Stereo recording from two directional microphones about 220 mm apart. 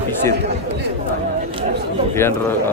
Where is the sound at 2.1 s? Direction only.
10° left (ahead or behind).